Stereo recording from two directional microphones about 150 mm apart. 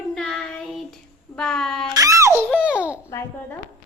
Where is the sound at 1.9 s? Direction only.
20° right (ahead or behind).